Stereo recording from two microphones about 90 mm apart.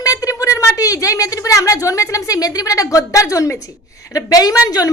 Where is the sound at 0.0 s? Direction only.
40° left (ahead or behind).